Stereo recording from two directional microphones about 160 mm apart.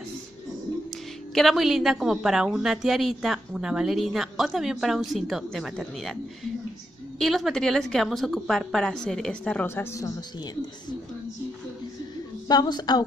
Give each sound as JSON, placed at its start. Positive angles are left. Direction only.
{"t": 1.3, "sound": "a woman's voice", "side_deg": 0}
{"t": 12.4, "sound": "a woman's voice", "side_deg": 25}